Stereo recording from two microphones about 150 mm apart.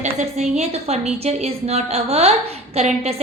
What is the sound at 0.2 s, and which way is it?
A woman's voice, 50° right (ahead or behind).